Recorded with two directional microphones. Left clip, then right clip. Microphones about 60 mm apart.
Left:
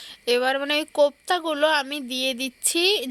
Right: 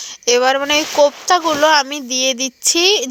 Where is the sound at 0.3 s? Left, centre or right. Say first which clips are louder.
Right 8 dB; right.